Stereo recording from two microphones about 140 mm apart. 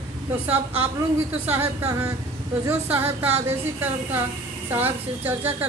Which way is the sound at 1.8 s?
20° right (ahead or behind).